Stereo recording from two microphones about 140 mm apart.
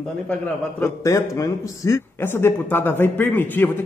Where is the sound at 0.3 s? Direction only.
15° left (ahead or behind).